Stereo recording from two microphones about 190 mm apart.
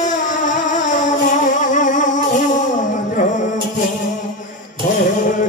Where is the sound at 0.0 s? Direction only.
40° left (ahead or behind).